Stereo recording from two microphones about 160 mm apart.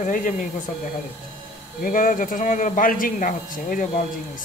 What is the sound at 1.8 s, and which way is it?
Speech, 60° left (ahead or behind).